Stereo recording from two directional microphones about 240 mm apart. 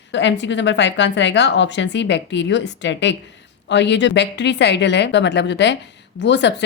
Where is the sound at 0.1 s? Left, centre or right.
Left.